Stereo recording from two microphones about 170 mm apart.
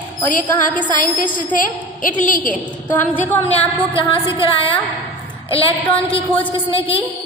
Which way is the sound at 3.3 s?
10° left (ahead or behind).